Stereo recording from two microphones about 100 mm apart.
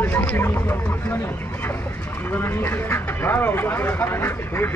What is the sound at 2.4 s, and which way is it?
Speech, 25° left (ahead or behind).